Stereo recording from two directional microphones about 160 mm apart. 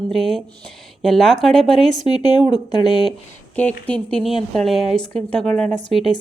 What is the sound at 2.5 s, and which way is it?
Speech, 25° left (ahead or behind).